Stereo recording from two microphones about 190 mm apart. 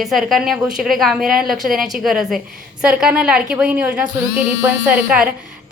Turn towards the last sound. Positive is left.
turn(degrees=-5)  # may be behind; listen again after turning